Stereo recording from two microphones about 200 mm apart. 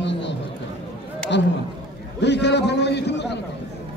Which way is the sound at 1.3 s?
60° left (ahead or behind).